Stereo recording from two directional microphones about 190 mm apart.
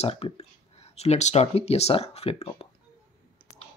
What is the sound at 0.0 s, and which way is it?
Speech, 35° left (ahead or behind).